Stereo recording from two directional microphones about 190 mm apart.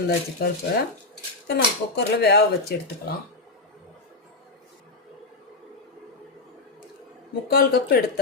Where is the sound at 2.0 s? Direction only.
60° left (ahead or behind).